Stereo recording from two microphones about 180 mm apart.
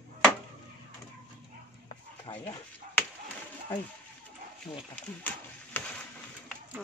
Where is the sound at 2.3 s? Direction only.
25° left (ahead or behind).